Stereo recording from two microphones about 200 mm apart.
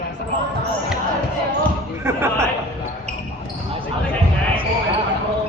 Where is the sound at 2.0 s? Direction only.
15° right (ahead or behind).